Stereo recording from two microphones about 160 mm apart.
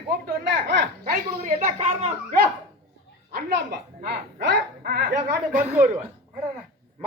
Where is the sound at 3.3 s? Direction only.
75° right (ahead or behind).